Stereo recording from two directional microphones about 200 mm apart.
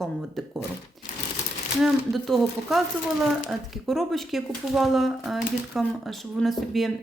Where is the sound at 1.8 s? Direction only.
Centre (ahead or behind).